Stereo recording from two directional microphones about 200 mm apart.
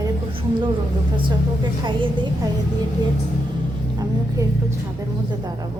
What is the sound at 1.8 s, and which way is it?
Speech, 25° right (ahead or behind).